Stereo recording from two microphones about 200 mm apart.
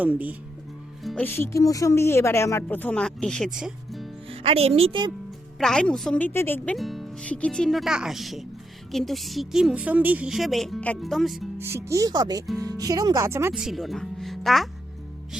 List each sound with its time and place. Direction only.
0.0 s speech: 10° right (ahead or behind)
1.0 s speech: 5° left (ahead or behind)
4.3 s speech: 30° right (ahead or behind)
5.5 s a woman's voice: 5° left (ahead or behind)
6.7 s a woman's voice: centre (ahead or behind)
11.6 s a woman's voice: 15° right (ahead or behind)